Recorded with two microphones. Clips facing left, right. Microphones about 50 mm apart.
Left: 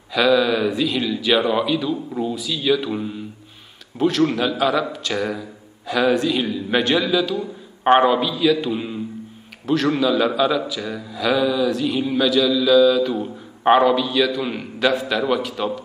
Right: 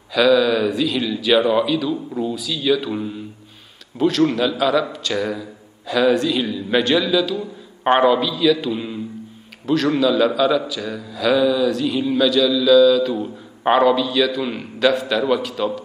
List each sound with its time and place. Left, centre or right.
0.1 s a man's voice: centre
4.3 s a man's voice: centre
7.3 s a sound: centre
8.0 s a man's voice: centre